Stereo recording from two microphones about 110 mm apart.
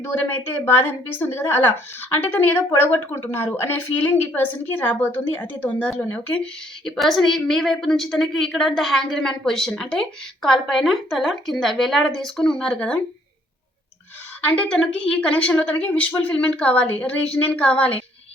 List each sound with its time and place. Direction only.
0.0 s a woman's voice: 20° left (ahead or behind)
14.4 s a woman's voice: 10° left (ahead or behind)